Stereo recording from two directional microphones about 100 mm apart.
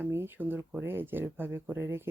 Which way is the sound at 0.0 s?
20° right (ahead or behind).